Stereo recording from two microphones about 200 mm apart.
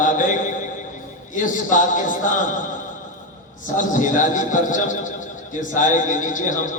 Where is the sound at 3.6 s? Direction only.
40° left (ahead or behind).